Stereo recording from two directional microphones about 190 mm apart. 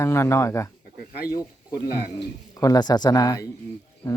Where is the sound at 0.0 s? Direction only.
15° left (ahead or behind).